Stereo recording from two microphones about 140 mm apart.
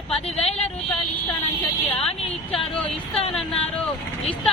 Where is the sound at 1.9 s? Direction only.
10° left (ahead or behind).